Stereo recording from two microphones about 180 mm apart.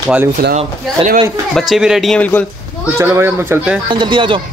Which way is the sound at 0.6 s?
35° right (ahead or behind).